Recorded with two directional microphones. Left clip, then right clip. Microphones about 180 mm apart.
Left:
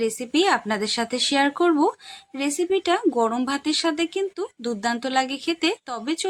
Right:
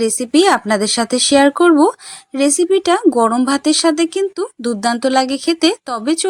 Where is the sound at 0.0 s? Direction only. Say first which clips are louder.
Right 8 dB; 40° right (ahead or behind).